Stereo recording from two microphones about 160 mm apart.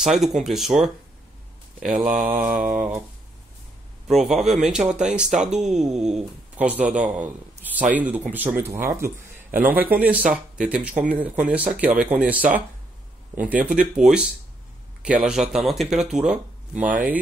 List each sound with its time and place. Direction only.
0.0 s speech: centre (ahead or behind)
2.0 s mantra: 50° right (ahead or behind)
2.2 s speech: 10° right (ahead or behind)
4.1 s speech: centre (ahead or behind)